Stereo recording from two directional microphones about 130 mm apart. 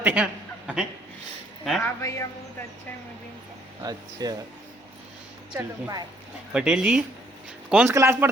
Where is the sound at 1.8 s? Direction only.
25° left (ahead or behind).